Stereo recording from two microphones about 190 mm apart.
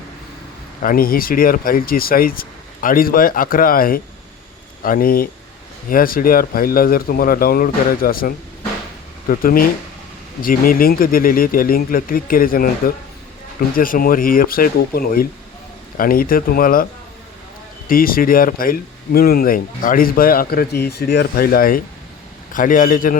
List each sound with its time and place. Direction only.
0.8 s speech: 50° left (ahead or behind)
17.8 s speech: 50° left (ahead or behind)